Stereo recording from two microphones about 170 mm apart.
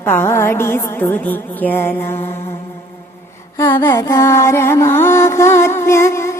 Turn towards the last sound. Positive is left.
turn(degrees=15)  # may be behind; listen again after turning